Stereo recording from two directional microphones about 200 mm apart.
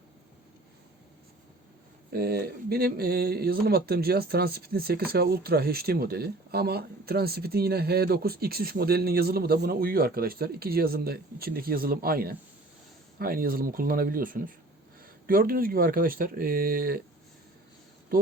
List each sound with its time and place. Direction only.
2.1 s speech: 50° right (ahead or behind)